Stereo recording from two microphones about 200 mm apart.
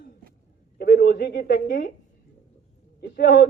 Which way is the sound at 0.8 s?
50° left (ahead or behind).